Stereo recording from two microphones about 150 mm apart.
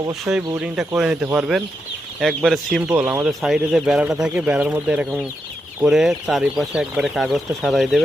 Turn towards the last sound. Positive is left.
turn(degrees=0)  # may be behind; listen again after turning